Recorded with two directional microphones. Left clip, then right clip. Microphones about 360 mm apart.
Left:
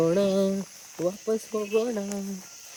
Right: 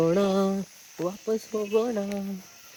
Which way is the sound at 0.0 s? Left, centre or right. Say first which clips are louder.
Even; centre.